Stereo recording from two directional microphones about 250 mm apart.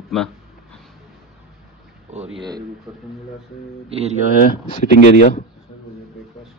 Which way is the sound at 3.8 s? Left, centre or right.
Right.